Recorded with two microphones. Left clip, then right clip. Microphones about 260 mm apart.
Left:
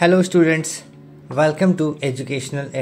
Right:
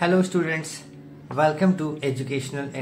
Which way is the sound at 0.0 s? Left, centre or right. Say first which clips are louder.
Left 7 dB; left.